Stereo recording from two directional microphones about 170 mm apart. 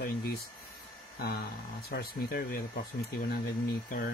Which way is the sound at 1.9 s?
65° left (ahead or behind).